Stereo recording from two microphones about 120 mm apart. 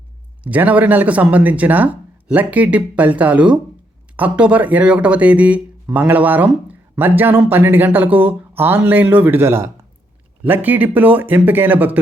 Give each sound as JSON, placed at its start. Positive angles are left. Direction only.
{"t": 0.4, "sound": "speech", "side_deg": -15}